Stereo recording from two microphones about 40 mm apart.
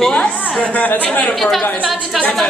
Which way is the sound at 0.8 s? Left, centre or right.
Left.